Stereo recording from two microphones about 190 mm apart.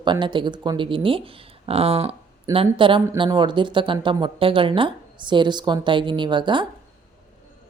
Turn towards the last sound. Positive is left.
turn(degrees=-25)  # may be behind; listen again after turning